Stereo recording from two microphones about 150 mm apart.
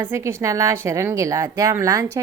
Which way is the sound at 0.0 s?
15° right (ahead or behind).